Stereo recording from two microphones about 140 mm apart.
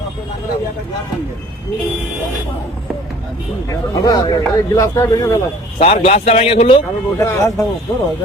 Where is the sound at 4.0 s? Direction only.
30° left (ahead or behind).